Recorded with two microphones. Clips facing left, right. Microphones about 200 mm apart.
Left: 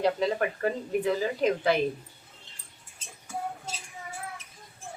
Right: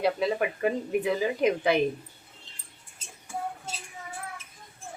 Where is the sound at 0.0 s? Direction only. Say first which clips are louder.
Even; 10° right (ahead or behind).